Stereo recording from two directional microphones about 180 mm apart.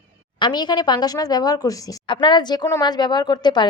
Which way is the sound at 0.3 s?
25° left (ahead or behind).